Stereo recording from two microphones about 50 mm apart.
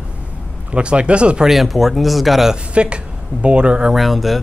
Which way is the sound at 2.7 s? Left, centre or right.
Right.